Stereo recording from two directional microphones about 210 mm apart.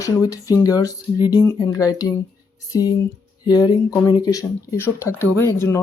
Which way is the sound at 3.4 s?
20° left (ahead or behind).